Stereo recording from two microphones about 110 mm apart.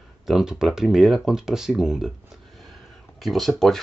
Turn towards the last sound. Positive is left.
turn(degrees=0)  # may be behind; listen again after turning